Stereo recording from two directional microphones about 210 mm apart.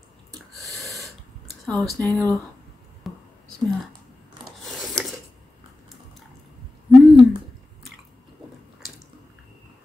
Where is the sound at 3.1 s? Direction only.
Centre (ahead or behind).